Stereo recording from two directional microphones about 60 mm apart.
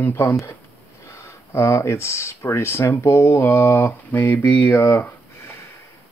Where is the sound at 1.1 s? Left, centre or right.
Left.